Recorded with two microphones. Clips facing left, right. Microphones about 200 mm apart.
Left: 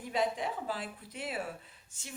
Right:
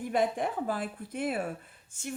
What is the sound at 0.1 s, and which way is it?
Speech, 55° right (ahead or behind).